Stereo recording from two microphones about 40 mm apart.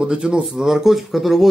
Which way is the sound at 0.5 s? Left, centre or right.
Centre.